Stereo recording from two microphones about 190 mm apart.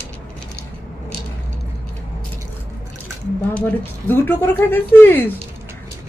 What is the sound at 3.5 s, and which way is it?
Speech, 10° left (ahead or behind).